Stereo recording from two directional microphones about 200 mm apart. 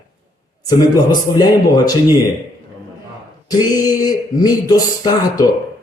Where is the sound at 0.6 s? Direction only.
20° left (ahead or behind).